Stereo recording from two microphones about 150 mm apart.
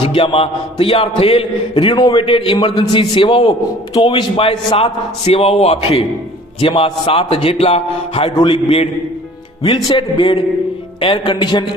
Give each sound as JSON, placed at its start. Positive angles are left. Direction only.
{"t": 0.0, "sound": "a man's voice", "side_deg": 35}
{"t": 9.9, "sound": "a man's voice", "side_deg": 35}